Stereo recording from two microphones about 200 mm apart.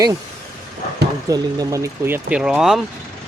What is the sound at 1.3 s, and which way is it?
Speech, 15° right (ahead or behind).